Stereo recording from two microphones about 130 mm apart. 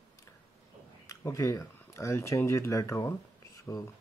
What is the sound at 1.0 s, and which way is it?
Speech, 25° left (ahead or behind).